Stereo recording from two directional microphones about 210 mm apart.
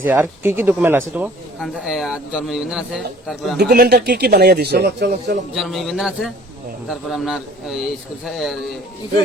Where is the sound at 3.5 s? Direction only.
50° right (ahead or behind).